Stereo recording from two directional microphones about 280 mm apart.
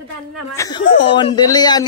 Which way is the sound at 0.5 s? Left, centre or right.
Centre.